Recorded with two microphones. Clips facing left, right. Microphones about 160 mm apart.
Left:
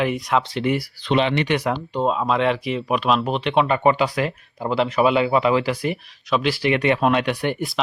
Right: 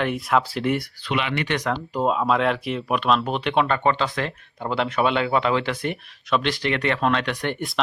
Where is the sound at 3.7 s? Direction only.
10° left (ahead or behind).